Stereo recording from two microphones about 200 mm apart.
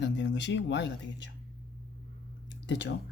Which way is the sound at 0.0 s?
60° left (ahead or behind).